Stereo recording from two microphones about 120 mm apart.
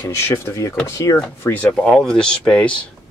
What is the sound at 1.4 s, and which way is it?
Speech, 10° left (ahead or behind).